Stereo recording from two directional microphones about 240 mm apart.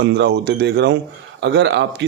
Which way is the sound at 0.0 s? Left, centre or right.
Right.